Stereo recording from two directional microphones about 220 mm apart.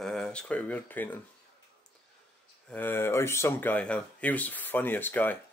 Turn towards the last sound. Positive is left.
turn(degrees=10)  # may be behind; listen again after turning